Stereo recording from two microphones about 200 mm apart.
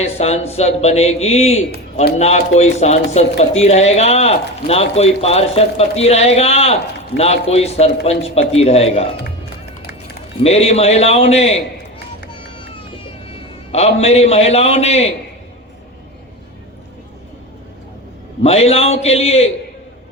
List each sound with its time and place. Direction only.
0.0 s speech: 30° left (ahead or behind)
10.4 s speech: 30° left (ahead or behind)
13.7 s speech: 30° left (ahead or behind)
18.4 s speech: 30° left (ahead or behind)